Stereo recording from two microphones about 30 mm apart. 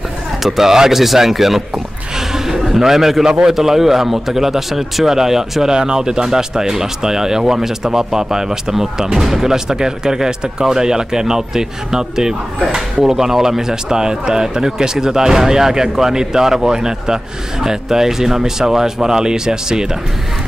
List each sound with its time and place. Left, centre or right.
0.4 s speech: centre
2.1 s a sound: centre
2.7 s speech: centre
5.7 s speech: right